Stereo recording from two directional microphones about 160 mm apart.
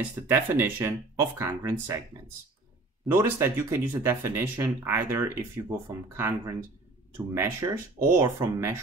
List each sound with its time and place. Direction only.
0.3 s speech: 15° right (ahead or behind)
3.1 s speech: 15° right (ahead or behind)